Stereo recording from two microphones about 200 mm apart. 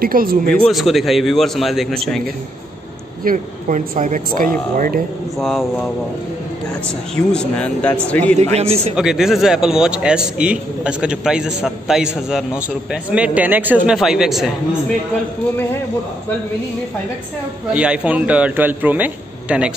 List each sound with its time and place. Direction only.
0.0 s speech: 45° right (ahead or behind)
0.7 s a man's voice: centre (ahead or behind)
3.3 s speech: 40° right (ahead or behind)
5.4 s a man's voice: centre (ahead or behind)
7.2 s a man's voice: 5° left (ahead or behind)
8.5 s speech: 30° right (ahead or behind)
8.9 s a man's voice: 5° right (ahead or behind)
17.7 s a man's voice: 5° right (ahead or behind)